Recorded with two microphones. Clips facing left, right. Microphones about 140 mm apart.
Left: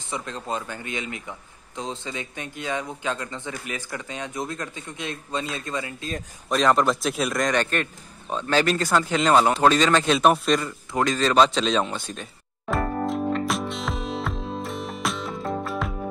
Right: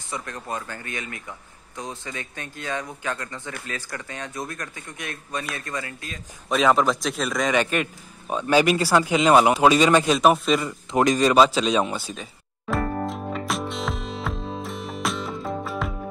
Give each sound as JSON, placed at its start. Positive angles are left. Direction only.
{"t": 0.1, "sound": "speech", "side_deg": 20}
{"t": 6.5, "sound": "a man's voice", "side_deg": 0}
{"t": 10.1, "sound": "a man's voice", "side_deg": 0}
{"t": 10.9, "sound": "a sound", "side_deg": -20}